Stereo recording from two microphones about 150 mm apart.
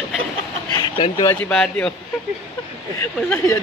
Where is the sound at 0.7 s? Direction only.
30° left (ahead or behind).